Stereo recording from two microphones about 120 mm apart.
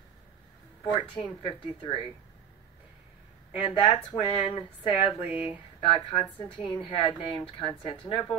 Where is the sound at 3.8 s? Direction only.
45° left (ahead or behind).